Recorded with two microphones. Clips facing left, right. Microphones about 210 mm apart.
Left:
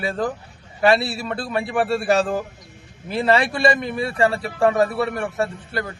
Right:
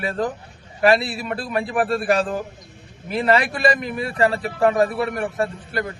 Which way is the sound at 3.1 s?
30° left (ahead or behind).